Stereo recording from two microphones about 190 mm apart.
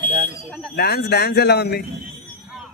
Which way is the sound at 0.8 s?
60° left (ahead or behind).